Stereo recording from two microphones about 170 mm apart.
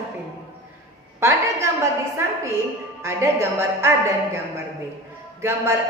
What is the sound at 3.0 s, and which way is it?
Speech, 15° right (ahead or behind).